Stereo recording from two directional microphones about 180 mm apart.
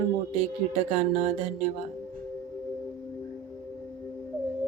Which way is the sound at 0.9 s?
40° right (ahead or behind).